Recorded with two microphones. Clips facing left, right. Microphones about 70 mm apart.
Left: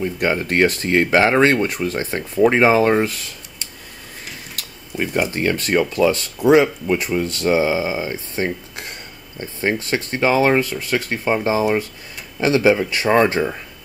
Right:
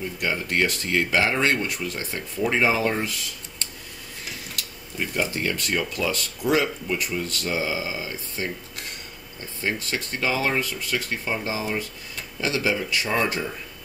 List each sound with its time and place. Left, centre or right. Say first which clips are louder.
0.0 s speech: left 7 dB; left
4.6 s a sound: left 7 dB; left
5.3 s speech: left 7 dB; left